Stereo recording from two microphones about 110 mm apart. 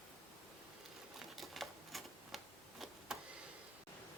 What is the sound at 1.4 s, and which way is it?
Typewriter, centre (ahead or behind).